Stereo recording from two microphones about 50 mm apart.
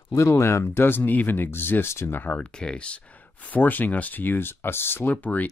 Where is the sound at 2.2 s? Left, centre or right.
Left.